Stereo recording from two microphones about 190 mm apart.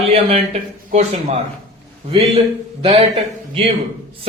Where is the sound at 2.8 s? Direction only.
30° right (ahead or behind).